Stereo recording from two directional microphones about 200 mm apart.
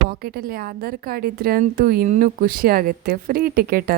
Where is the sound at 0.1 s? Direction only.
45° right (ahead or behind).